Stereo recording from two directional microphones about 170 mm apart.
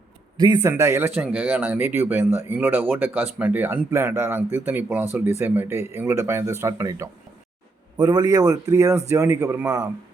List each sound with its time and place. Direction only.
0.3 s speech: 25° right (ahead or behind)